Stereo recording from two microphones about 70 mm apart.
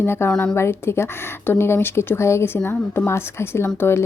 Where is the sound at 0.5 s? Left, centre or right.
Left.